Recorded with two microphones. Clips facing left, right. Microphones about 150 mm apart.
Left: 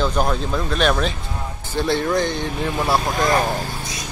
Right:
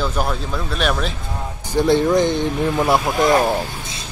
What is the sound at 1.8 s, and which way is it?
Speech, 15° right (ahead or behind).